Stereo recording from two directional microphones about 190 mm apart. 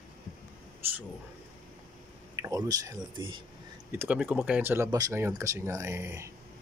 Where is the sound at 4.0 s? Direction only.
10° right (ahead or behind).